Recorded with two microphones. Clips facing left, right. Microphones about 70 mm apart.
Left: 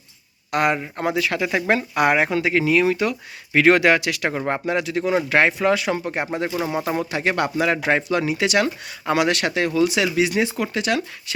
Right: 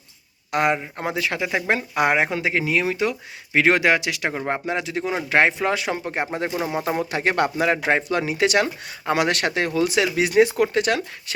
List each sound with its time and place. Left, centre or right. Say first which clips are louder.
0.5 s speech: left 1 dB; right; by 4.6 s centre
4.6 s speech: left 3 dB; right
7.1 s speech: right 1 dB; right